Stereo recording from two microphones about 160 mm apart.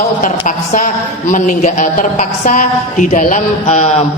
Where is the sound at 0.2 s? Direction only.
50° left (ahead or behind).